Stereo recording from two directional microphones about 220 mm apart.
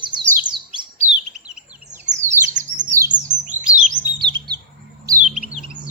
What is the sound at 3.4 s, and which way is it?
Chirp, 35° right (ahead or behind).